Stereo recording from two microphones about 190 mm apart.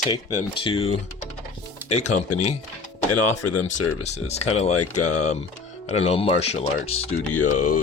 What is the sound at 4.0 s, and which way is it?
Speech, 35° left (ahead or behind).